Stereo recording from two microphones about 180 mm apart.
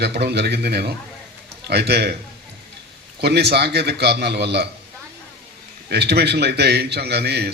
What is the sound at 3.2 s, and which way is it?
A man's voice, 65° right (ahead or behind).